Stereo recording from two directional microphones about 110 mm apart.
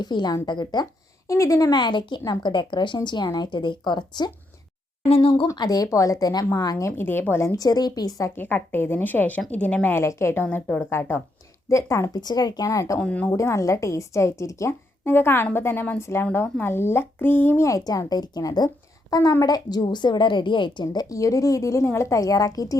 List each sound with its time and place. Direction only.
0.0 s a woman's voice: 40° left (ahead or behind)
1.3 s speech: 30° left (ahead or behind)
5.0 s speech: 60° left (ahead or behind)
5.5 s a woman's voice: 35° left (ahead or behind)
8.4 s a woman's voice: 15° left (ahead or behind)
11.7 s a woman's voice: 25° left (ahead or behind)
13.0 s a woman's voice: 10° left (ahead or behind)
13.3 s a woman's voice: 25° left (ahead or behind)
17.7 s a woman's voice: 30° left (ahead or behind)